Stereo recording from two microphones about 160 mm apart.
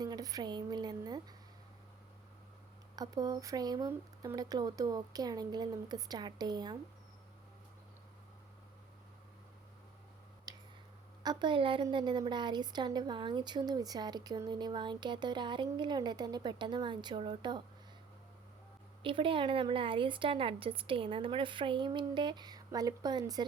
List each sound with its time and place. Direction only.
0.0 s speech: 25° right (ahead or behind)
2.9 s a woman's voice: 25° right (ahead or behind)
10.5 s a sound: 25° right (ahead or behind)
11.2 s a woman's voice: 25° right (ahead or behind)
19.0 s a woman's voice: 35° right (ahead or behind)